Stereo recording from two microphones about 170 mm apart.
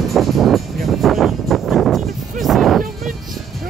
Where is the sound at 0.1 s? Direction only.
Centre (ahead or behind).